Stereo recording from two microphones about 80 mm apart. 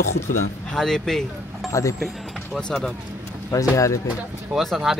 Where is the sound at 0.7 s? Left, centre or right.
Centre.